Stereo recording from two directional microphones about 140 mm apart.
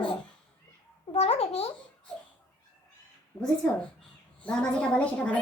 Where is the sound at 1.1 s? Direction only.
45° left (ahead or behind).